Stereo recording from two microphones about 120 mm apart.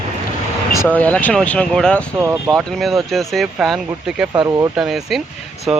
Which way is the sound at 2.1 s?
25° right (ahead or behind).